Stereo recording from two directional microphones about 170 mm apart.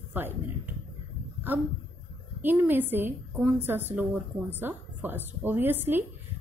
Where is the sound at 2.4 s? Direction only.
10° right (ahead or behind).